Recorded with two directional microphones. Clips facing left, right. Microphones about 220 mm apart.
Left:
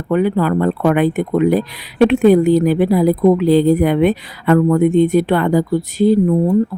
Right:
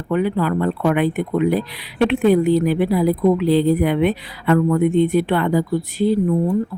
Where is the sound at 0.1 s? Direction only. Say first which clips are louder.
Left 4 dB; 45° left (ahead or behind).